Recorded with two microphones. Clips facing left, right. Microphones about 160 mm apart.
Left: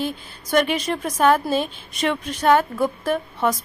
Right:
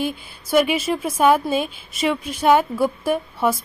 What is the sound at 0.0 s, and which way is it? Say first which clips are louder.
A woman's voice: right 2 dB; 10° right (ahead or behind).